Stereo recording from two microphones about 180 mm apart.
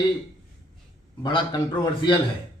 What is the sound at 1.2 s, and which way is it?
A man's voice, 25° left (ahead or behind).